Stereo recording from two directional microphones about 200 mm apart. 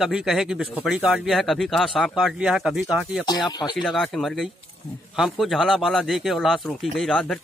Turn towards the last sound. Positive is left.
turn(degrees=0)  # may be behind; listen again after turning